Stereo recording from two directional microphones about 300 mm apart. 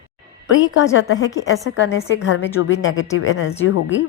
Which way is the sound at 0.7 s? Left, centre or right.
Left.